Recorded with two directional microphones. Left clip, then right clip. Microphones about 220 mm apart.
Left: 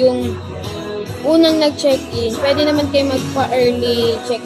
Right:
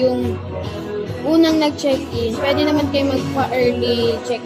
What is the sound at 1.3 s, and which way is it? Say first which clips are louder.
A woman's voice: left 3 dB; 10° left (ahead or behind).